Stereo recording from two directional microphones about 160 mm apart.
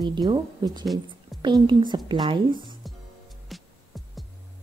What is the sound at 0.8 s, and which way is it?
Speech, centre (ahead or behind).